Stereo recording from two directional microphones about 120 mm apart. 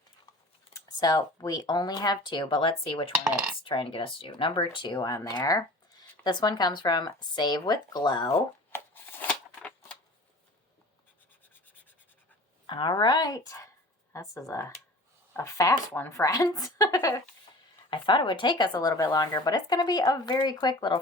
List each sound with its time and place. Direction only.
0.7 s speech: 35° left (ahead or behind)
3.2 s cutlery: 5° right (ahead or behind)
3.6 s speech: 45° left (ahead or behind)
8.4 s shuffling cards: 20° left (ahead or behind)
9.6 s typewriter: 10° left (ahead or behind)
12.6 s speech: 40° left (ahead or behind)
17.9 s speech: 40° left (ahead or behind)